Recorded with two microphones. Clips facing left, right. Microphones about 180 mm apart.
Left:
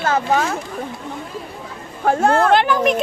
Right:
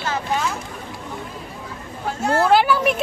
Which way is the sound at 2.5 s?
5° right (ahead or behind).